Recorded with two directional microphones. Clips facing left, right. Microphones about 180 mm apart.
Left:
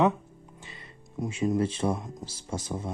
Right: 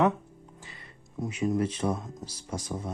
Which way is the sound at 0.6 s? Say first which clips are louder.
Left 2 dB; 20° left (ahead or behind).